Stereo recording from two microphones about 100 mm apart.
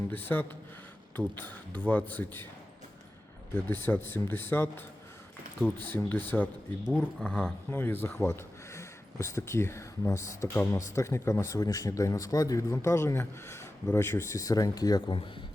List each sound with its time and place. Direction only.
0.1 s speech: 20° left (ahead or behind)
3.5 s speech: 20° left (ahead or behind)
5.8 s speech: 20° left (ahead or behind)
6.8 s speech: 5° right (ahead or behind)
7.3 s speech: 10° left (ahead or behind)
7.7 s speech: 20° left (ahead or behind); by 15.1 s 40° left (ahead or behind)